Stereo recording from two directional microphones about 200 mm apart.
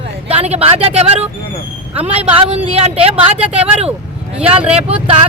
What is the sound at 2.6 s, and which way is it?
Speech, 30° right (ahead or behind).